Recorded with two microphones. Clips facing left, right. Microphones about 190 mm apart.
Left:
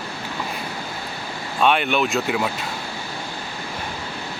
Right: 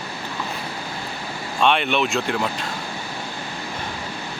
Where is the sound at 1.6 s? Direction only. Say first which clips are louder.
Left 1 dB; 5° left (ahead or behind).